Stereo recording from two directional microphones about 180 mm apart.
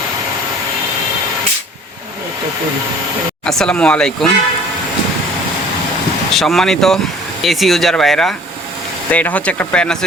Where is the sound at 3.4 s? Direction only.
5° left (ahead or behind).